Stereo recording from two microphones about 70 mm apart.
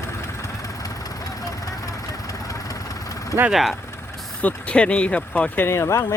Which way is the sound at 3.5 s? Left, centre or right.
Centre.